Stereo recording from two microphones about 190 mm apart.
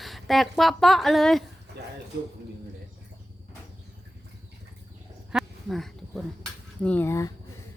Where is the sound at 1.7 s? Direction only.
60° right (ahead or behind).